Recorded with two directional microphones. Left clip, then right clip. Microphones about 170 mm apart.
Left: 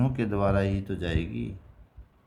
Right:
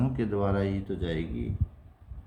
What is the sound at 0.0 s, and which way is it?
Speech, 45° left (ahead or behind).